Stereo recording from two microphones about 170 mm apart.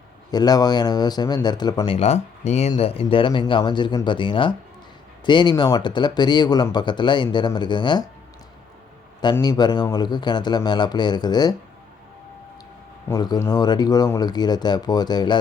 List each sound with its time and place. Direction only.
0.3 s speech: 25° left (ahead or behind)
2.0 s speech: 40° left (ahead or behind)
9.3 s speech: 20° left (ahead or behind)
13.1 s speech: 20° left (ahead or behind)